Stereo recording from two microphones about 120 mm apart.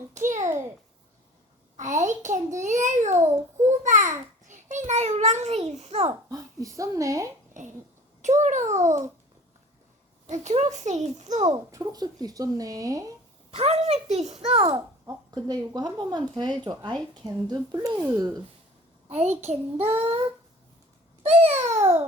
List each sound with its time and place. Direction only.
0.3 s a sound: 85° right
1.7 s a child's voice: 90° right; by 6.1 s 60° right (ahead or behind)
6.2 s speech: 30° right (ahead or behind)
7.6 s a child's voice: 90° right
10.2 s a child's voice: 80° right
11.4 s speech: 30° right (ahead or behind)
13.5 s a child's voice: 60° right (ahead or behind)
14.7 s a child's voice: 30° right (ahead or behind)
19.0 s a child's voice: 65° right (ahead or behind)
21.2 s a child's voice: 65° right (ahead or behind)